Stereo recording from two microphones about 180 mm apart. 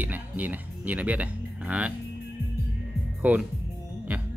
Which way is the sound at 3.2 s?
10° right (ahead or behind).